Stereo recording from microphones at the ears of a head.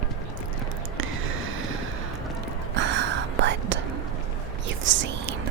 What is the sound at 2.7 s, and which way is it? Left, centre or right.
Whispering, right.